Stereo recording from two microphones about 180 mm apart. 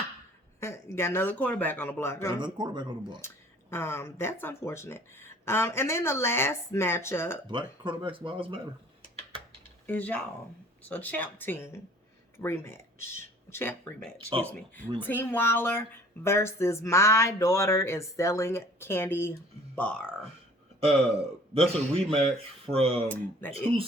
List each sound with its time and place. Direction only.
0.6 s speech: 15° left (ahead or behind)
2.4 s speech: 25° right (ahead or behind)
3.2 s speech: 15° left (ahead or behind)
7.4 s speech: 25° right (ahead or behind)
9.8 s speech: 10° left (ahead or behind)
21.5 s a man's voice: 30° right (ahead or behind)
23.0 s speech: 10° left (ahead or behind)